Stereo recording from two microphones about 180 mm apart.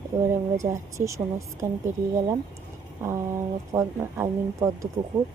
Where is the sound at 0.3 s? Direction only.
15° right (ahead or behind).